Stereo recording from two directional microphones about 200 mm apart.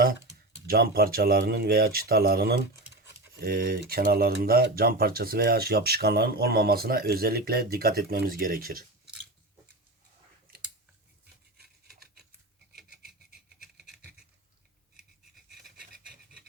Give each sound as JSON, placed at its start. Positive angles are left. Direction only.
{"t": 0.7, "sound": "speech", "side_deg": -50}
{"t": 15.5, "sound": "pant", "side_deg": 0}